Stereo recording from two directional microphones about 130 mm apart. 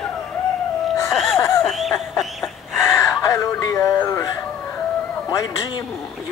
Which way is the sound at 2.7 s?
20° left (ahead or behind).